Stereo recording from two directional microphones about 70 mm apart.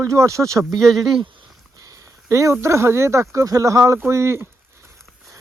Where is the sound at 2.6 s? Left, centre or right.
Right.